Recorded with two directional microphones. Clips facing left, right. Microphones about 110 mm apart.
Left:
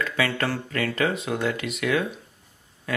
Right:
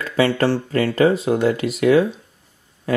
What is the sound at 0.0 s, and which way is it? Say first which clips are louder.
Speech: right 8 dB; 30° right (ahead or behind).